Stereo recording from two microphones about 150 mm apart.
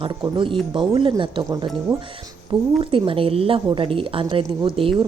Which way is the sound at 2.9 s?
35° right (ahead or behind).